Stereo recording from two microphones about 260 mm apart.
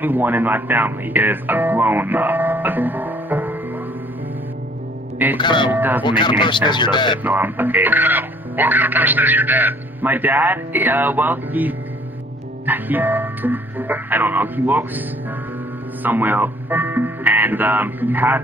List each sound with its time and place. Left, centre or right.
0.0 s speech: centre
5.4 s speech: centre
5.7 s speech: centre
6.0 s speech: centre
7.2 s speech: centre